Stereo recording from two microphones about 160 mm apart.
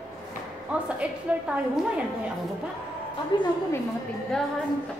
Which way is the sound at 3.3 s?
30° left (ahead or behind).